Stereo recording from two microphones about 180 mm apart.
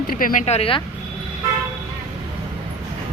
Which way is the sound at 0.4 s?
35° left (ahead or behind).